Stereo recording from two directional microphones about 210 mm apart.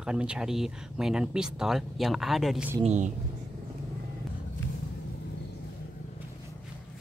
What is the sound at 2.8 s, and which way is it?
Speech, 35° right (ahead or behind).